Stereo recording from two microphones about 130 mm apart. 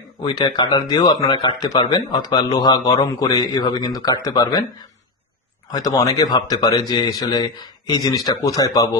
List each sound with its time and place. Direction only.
0.2 s speech: 35° left (ahead or behind)